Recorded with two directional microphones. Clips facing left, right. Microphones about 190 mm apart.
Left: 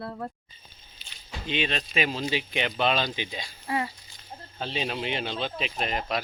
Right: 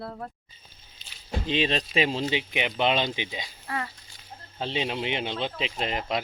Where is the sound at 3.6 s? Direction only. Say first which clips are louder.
Left 4 dB; 15° left (ahead or behind).